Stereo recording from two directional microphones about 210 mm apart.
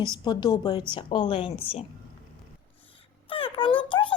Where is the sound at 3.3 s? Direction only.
25° left (ahead or behind).